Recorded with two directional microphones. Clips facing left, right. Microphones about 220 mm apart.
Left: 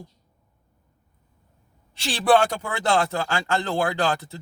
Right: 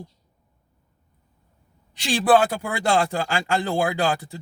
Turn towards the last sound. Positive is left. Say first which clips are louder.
# right 1 dB
turn(degrees=-15)  # may be behind; listen again after turning